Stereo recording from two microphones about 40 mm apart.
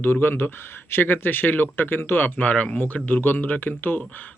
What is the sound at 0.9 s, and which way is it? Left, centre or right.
Speech, left.